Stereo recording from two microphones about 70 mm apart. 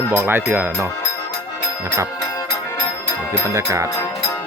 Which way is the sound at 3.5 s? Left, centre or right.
Right.